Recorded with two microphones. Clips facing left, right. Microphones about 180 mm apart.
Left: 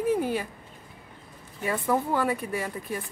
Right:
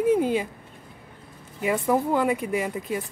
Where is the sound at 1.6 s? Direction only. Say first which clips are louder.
Right 4 dB; 15° right (ahead or behind).